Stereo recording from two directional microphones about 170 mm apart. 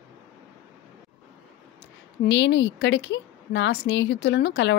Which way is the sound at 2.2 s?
90° left.